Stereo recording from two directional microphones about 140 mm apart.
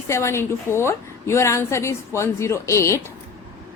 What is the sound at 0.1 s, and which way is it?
A woman's voice, 20° left (ahead or behind).